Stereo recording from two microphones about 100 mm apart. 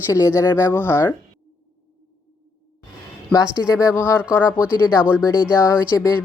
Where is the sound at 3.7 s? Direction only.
30° left (ahead or behind).